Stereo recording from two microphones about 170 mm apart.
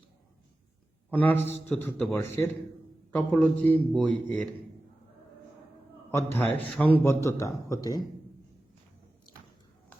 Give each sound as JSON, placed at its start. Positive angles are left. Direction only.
{"t": 1.1, "sound": "a man's voice", "side_deg": 10}
{"t": 6.1, "sound": "a man's voice", "side_deg": 15}